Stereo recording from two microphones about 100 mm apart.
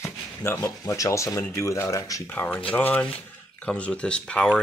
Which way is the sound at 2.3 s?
20° left (ahead or behind).